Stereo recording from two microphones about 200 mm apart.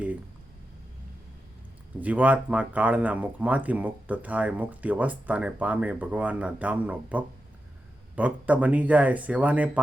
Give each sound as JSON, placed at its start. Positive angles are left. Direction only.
{"t": 2.0, "sound": "speech", "side_deg": -5}